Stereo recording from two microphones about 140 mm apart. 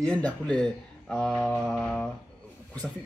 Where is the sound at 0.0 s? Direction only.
10° left (ahead or behind).